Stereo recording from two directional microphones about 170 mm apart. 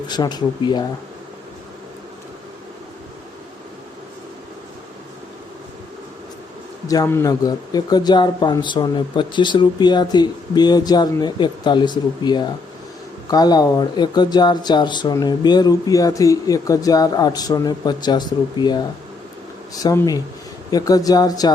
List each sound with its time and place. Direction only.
0.1 s speech: 25° left (ahead or behind)
6.8 s speech: 20° left (ahead or behind)